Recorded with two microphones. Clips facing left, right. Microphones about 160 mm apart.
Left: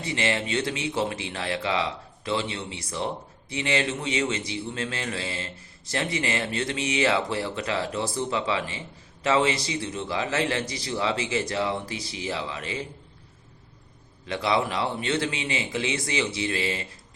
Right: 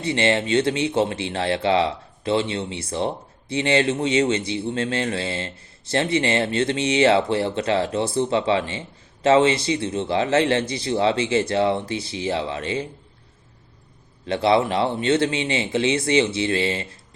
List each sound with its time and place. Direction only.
0.0 s a man's voice: 30° right (ahead or behind)
14.3 s a man's voice: 25° right (ahead or behind)